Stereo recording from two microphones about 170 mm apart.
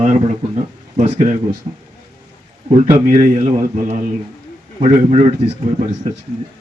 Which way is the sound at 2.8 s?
50° right (ahead or behind).